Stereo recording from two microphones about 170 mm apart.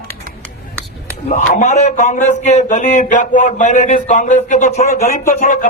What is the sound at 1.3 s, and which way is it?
Speech, 45° left (ahead or behind).